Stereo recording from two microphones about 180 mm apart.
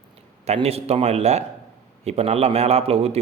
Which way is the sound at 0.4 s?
35° right (ahead or behind).